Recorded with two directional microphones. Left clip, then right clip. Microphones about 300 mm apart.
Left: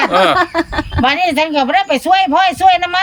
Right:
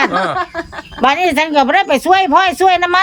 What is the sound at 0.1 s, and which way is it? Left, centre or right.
Snicker, left.